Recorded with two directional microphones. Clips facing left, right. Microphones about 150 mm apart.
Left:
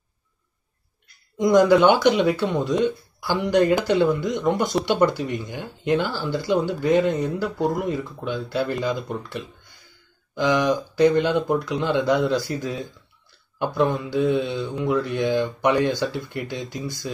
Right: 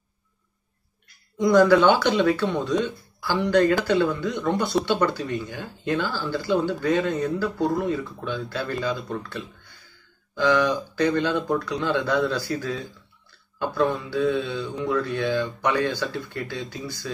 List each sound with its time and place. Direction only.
1.4 s speech: 20° left (ahead or behind)